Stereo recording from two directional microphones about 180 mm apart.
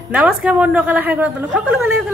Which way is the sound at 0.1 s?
5° right (ahead or behind).